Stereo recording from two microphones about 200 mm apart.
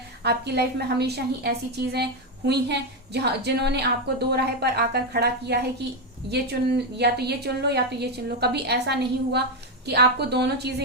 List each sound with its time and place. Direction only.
0.2 s a woman's voice: 55° right (ahead or behind)
7.0 s a woman's voice: 55° right (ahead or behind)